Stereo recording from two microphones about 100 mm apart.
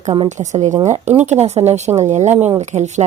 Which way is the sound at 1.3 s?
90° right.